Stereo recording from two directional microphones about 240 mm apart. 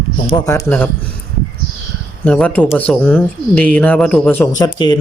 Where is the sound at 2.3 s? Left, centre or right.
Centre.